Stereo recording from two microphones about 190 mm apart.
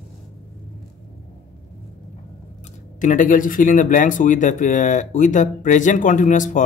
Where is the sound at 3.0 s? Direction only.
45° left (ahead or behind).